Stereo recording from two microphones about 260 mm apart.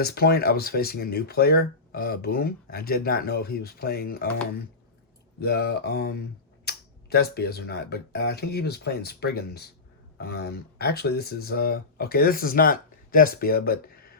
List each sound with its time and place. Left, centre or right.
0.0 s speech: left
5.4 s speech: left